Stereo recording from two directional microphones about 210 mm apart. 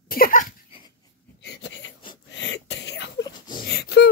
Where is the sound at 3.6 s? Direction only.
50° left (ahead or behind).